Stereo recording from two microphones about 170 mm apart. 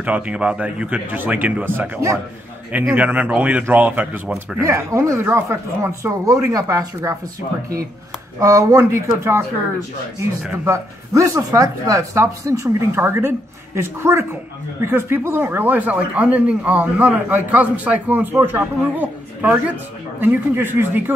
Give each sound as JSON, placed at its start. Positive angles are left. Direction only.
{"t": 0.0, "sound": "speech", "side_deg": -5}
{"t": 8.4, "sound": "speech", "side_deg": -20}
{"t": 10.4, "sound": "speech", "side_deg": -15}